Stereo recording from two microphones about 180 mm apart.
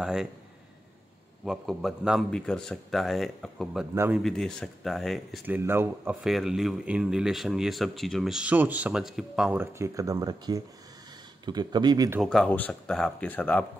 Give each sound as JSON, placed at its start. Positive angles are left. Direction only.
{"t": 0.0, "sound": "speech", "side_deg": -5}
{"t": 1.4, "sound": "speech", "side_deg": 0}
{"t": 3.9, "sound": "speech", "side_deg": -15}
{"t": 4.2, "sound": "speech", "side_deg": 0}
{"t": 5.6, "sound": "speech", "side_deg": -15}
{"t": 6.2, "sound": "speech", "side_deg": 0}
{"t": 12.2, "sound": "speech", "side_deg": 5}